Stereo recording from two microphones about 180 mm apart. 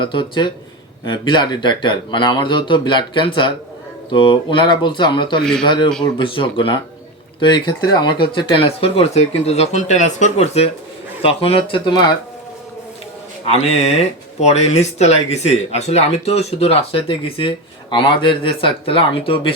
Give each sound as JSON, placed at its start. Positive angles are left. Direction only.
{"t": 0.0, "sound": "speech", "side_deg": 25}
{"t": 5.4, "sound": "speech", "side_deg": 5}
{"t": 5.6, "sound": "speech", "side_deg": 25}
{"t": 13.5, "sound": "speech", "side_deg": 35}